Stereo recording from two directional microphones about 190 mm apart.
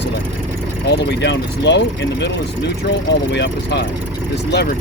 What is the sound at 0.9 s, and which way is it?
Speech, 65° left (ahead or behind).